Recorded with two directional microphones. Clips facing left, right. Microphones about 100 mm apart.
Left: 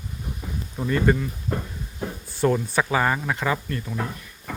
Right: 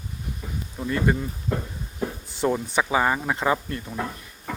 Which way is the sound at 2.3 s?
15° right (ahead or behind).